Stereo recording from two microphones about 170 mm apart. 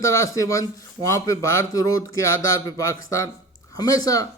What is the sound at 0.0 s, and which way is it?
A man's voice, 15° left (ahead or behind).